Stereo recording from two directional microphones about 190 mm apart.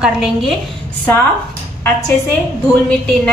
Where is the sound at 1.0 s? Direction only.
10° left (ahead or behind).